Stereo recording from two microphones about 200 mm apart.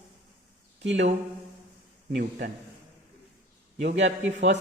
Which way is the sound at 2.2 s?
55° right (ahead or behind).